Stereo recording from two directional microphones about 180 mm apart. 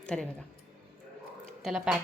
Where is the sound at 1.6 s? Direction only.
5° right (ahead or behind).